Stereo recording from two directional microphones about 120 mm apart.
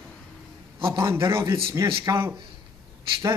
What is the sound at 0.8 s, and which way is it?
A man's voice, 25° right (ahead or behind).